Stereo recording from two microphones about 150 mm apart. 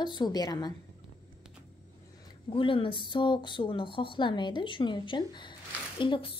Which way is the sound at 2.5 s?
35° left (ahead or behind).